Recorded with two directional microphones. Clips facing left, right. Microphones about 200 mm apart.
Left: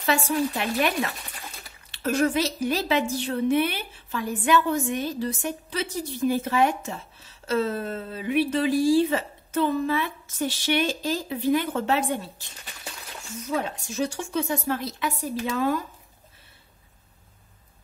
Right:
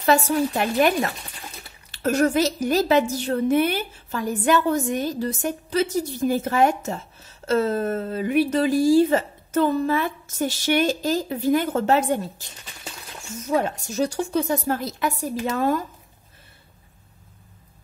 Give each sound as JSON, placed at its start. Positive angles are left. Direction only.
{"t": 0.0, "sound": "a woman's voice", "side_deg": -45}
{"t": 13.5, "sound": "a woman's voice", "side_deg": -45}